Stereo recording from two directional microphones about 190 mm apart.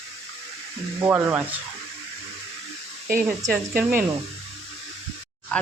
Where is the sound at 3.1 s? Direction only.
15° right (ahead or behind).